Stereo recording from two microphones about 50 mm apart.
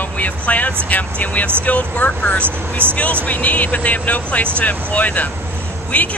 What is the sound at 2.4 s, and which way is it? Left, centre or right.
Speech, right.